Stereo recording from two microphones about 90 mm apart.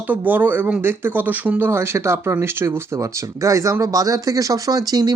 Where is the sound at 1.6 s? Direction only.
30° right (ahead or behind).